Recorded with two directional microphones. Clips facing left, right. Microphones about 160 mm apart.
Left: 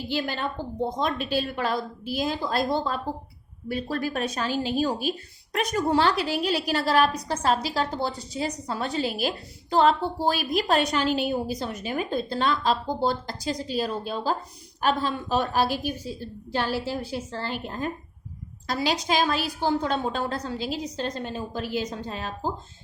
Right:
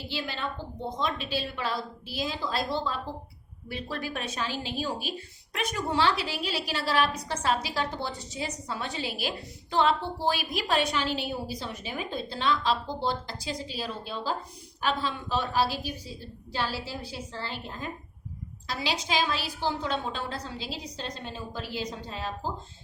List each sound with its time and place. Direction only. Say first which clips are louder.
0.1 s a woman's voice: left 5 dB; 50° left (ahead or behind)